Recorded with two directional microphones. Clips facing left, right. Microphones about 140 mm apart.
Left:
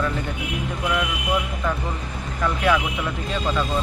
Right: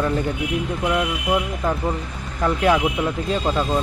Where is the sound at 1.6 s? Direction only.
35° right (ahead or behind).